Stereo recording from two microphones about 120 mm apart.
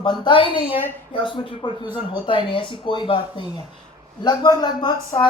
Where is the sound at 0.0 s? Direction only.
40° left (ahead or behind).